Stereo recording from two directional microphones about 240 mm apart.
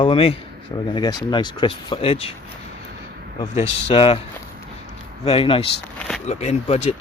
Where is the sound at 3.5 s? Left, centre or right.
Left.